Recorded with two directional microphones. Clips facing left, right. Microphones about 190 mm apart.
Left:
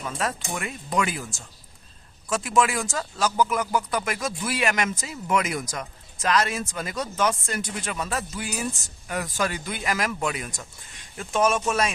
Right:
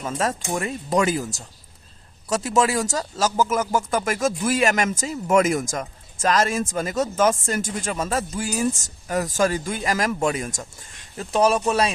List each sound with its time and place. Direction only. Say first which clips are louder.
0.0 s speech: right 4 dB; 40° right (ahead or behind)